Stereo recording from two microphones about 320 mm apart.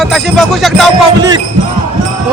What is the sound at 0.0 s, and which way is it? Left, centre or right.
Speech, centre.